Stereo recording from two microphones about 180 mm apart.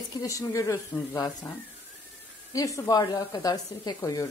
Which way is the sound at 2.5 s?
20° left (ahead or behind).